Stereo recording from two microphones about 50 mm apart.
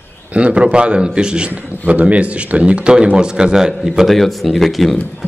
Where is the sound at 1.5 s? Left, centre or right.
Right; by 3.7 s centre.